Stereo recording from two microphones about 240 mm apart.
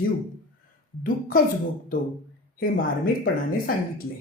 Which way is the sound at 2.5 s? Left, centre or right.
Left.